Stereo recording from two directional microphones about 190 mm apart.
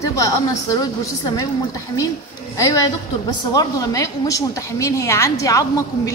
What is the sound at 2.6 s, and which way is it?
A woman's voice, 20° left (ahead or behind).